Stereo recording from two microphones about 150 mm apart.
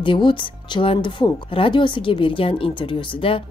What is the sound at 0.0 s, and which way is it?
Speech, 35° left (ahead or behind).